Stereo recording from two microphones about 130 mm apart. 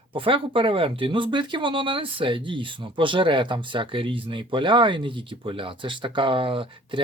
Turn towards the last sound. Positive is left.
turn(degrees=-40)  # may be behind; listen again after turning